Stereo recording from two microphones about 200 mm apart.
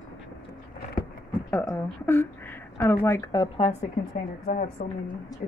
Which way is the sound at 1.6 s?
10° left (ahead or behind).